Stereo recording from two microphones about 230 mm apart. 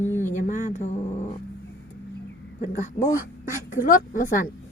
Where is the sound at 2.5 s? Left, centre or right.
Left.